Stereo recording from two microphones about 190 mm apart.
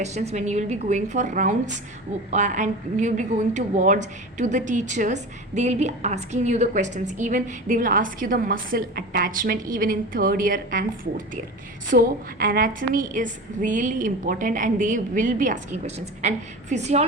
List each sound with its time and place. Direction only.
0.0 s a woman's voice: 35° right (ahead or behind)